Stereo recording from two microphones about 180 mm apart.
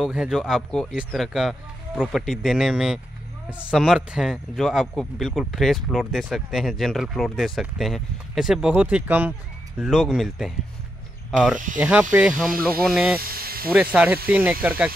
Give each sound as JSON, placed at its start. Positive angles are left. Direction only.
{"t": 0.0, "sound": "speech", "side_deg": -5}
{"t": 13.2, "sound": "speech", "side_deg": -55}
{"t": 13.7, "sound": "speech", "side_deg": -10}